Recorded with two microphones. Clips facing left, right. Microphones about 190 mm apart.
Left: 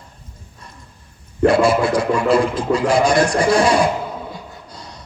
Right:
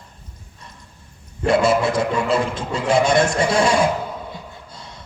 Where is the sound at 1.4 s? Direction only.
25° right (ahead or behind).